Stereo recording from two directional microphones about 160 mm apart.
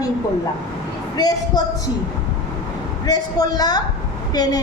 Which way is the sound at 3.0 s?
25° left (ahead or behind).